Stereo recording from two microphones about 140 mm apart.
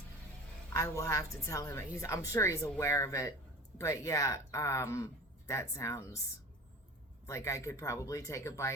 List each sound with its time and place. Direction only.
0.7 s a woman's voice: 20° left (ahead or behind)
7.3 s a woman's voice: 20° left (ahead or behind)